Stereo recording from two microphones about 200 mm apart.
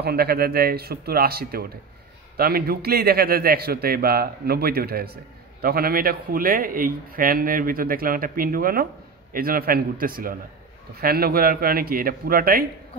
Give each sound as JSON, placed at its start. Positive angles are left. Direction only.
{"t": 0.0, "sound": "a man's voice", "side_deg": -50}